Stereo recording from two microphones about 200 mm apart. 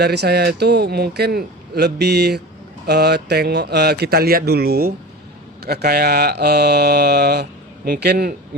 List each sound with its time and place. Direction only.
0.0 s speech: 55° right (ahead or behind)